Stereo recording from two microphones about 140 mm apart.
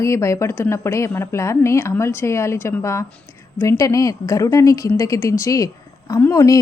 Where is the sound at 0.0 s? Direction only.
20° left (ahead or behind).